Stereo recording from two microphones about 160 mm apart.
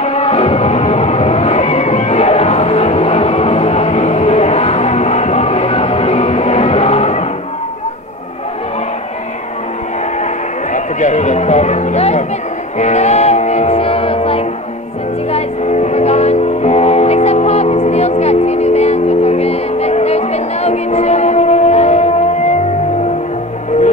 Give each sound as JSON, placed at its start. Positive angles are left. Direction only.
{"t": 0.0, "sound": "music", "side_deg": 40}
{"t": 10.7, "sound": "music", "side_deg": 50}